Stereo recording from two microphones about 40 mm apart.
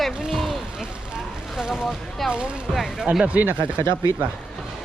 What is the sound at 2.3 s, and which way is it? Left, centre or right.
Speech, right.